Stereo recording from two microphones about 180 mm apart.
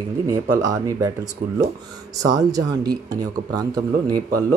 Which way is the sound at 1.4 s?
55° right (ahead or behind).